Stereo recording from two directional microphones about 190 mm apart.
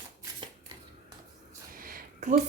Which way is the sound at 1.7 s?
50° right (ahead or behind).